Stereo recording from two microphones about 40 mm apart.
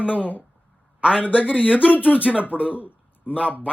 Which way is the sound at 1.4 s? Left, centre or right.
Left.